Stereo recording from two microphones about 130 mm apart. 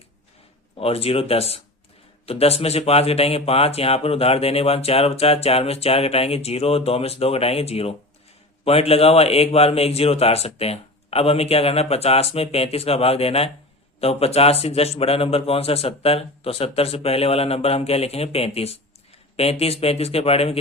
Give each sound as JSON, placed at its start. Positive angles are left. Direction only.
{"t": 0.8, "sound": "speech", "side_deg": 50}